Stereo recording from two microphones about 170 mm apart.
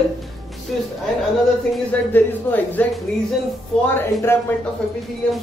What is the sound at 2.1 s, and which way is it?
Speech, 10° left (ahead or behind).